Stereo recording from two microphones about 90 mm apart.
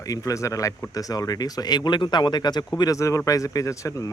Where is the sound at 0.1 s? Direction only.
40° left (ahead or behind).